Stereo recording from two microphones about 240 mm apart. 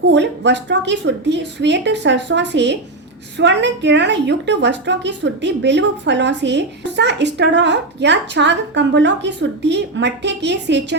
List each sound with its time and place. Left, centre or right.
0.1 s a woman's voice: right